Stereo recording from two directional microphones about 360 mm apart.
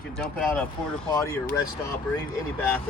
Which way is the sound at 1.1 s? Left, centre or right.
Centre.